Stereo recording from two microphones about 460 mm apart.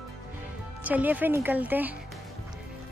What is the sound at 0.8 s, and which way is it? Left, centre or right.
A woman's voice, centre.